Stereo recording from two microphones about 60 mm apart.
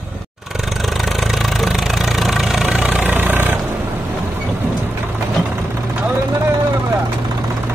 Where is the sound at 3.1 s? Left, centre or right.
Right.